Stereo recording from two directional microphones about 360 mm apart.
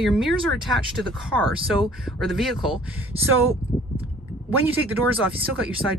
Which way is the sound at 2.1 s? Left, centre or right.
Centre.